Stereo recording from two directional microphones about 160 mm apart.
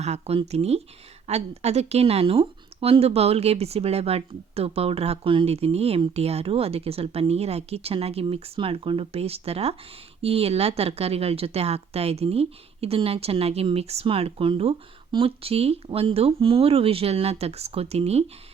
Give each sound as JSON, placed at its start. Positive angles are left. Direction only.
{"t": 0.0, "sound": "speech", "side_deg": -40}